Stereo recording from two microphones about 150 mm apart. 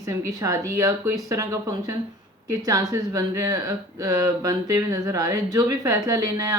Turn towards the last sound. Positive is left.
turn(degrees=-25)  # may be behind; listen again after turning